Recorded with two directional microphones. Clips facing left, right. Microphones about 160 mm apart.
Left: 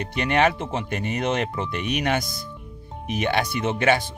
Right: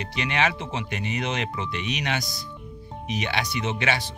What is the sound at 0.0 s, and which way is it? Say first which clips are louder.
Speech: left 5 dB; 50° left (ahead or behind).